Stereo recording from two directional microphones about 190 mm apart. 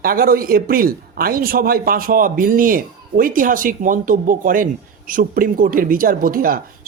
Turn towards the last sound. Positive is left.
turn(degrees=-50)  # may be behind; listen again after turning